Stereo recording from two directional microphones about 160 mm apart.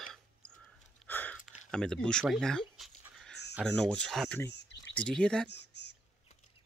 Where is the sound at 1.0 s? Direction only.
10° left (ahead or behind).